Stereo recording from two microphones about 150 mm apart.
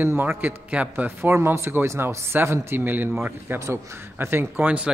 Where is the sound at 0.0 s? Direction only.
15° right (ahead or behind).